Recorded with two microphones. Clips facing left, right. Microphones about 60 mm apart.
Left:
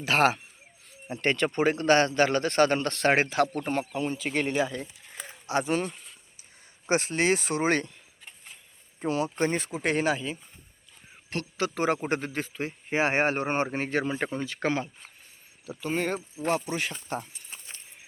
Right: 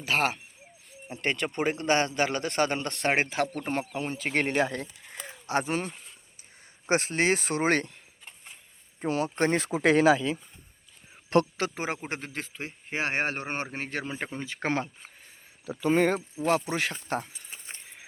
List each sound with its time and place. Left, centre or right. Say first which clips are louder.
0.0 s speech: left 4 dB; centre
1.0 s a man's voice: left 4 dB; centre
3.7 s speech: left 2 dB; right
5.5 s speech: left 1 dB; right
9.0 s speech: even; right
10.0 s speech: right 7 dB; right
11.7 s a man's voice: left 6 dB; centre
11.9 s speech: left 6 dB; centre
14.4 s speech: left 3 dB; right
15.7 s speech: right 5 dB; right